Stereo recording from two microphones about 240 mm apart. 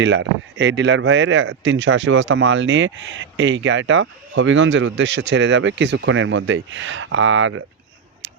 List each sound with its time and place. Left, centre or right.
0.0 s speech: right